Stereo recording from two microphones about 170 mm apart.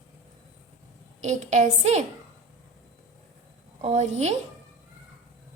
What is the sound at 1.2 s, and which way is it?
Speech, 45° right (ahead or behind).